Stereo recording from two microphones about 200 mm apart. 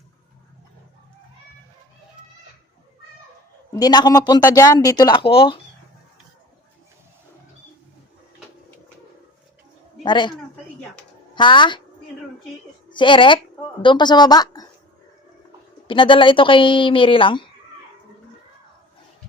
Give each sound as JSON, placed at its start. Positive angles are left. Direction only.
{"t": 3.8, "sound": "speech", "side_deg": 20}
{"t": 10.0, "sound": "a man's voice", "side_deg": 20}
{"t": 11.3, "sound": "speech", "side_deg": 25}
{"t": 12.9, "sound": "speech", "side_deg": 25}
{"t": 15.9, "sound": "speech", "side_deg": 25}